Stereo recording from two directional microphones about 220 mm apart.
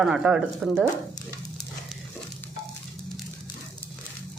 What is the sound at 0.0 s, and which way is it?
Speech, 5° right (ahead or behind).